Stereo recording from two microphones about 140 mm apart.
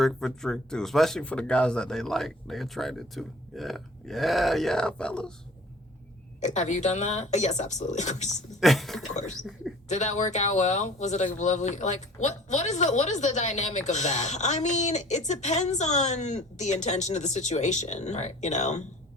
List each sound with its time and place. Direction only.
0.0 s speech: centre (ahead or behind)
6.4 s speech: 55° left (ahead or behind)
8.3 s speech: centre (ahead or behind)
9.9 s speech: 55° left (ahead or behind)